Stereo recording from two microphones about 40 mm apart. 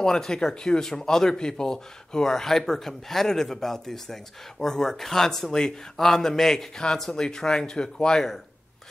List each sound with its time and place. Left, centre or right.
0.0 s speech: centre